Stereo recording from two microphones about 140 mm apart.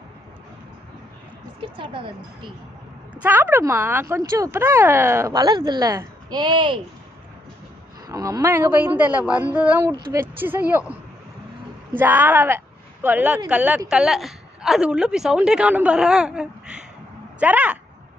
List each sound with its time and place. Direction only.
1.6 s speech: 35° right (ahead or behind)
3.2 s speech: 10° right (ahead or behind); by 6.7 s 35° right (ahead or behind)
8.0 s a man's voice: 25° right (ahead or behind)
11.9 s a woman's voice: 15° right (ahead or behind)